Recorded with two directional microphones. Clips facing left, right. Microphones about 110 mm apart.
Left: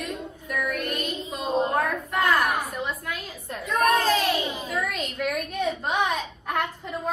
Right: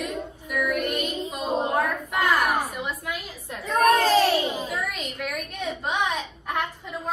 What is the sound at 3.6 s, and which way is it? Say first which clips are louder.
Speech: right 2 dB; 40° right (ahead or behind).